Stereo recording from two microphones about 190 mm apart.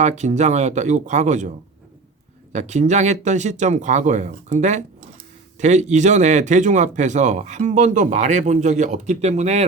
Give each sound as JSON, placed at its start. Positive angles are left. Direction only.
{"t": 0.0, "sound": "speech", "side_deg": -40}
{"t": 2.5, "sound": "speech", "side_deg": -40}